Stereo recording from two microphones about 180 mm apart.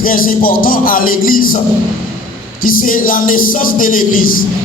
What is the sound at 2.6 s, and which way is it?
A man's voice, 50° left (ahead or behind).